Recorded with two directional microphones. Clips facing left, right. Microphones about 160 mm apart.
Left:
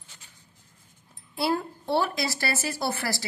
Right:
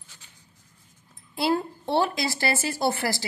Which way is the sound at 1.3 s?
25° right (ahead or behind).